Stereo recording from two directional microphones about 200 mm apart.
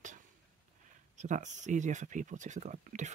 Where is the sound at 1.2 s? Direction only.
40° right (ahead or behind).